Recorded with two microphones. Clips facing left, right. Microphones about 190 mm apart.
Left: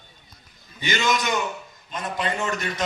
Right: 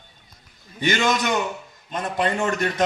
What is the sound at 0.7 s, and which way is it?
A man's voice, 55° right (ahead or behind).